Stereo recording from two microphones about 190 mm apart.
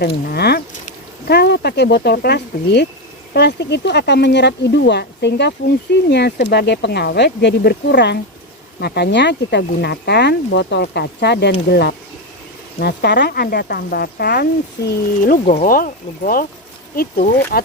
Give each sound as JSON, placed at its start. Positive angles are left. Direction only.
{"t": 0.0, "sound": "speech", "side_deg": 55}